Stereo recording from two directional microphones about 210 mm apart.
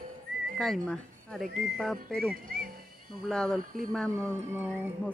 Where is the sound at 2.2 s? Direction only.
45° right (ahead or behind).